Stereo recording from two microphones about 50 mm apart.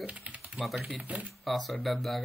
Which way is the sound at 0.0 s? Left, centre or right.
Right.